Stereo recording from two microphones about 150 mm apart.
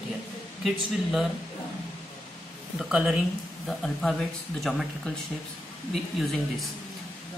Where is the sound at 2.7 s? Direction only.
5° right (ahead or behind).